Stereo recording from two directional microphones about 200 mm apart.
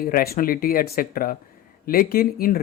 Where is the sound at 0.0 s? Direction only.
50° left (ahead or behind).